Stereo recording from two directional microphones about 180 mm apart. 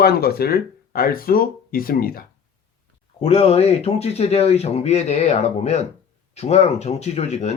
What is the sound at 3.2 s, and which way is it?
Speech, 35° left (ahead or behind).